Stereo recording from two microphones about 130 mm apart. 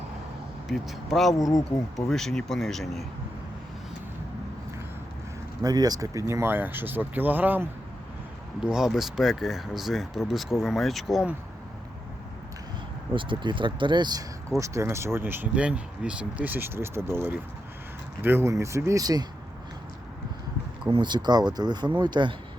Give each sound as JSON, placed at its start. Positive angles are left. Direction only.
{"t": 0.7, "sound": "speech", "side_deg": 0}
{"t": 1.4, "sound": "speech", "side_deg": 25}
{"t": 2.0, "sound": "speech", "side_deg": 5}
{"t": 5.6, "sound": "speech", "side_deg": -30}
{"t": 8.6, "sound": "speech", "side_deg": -5}
{"t": 13.1, "sound": "speech", "side_deg": -40}
{"t": 14.6, "sound": "speech", "side_deg": -20}
{"t": 20.9, "sound": "speech", "side_deg": -35}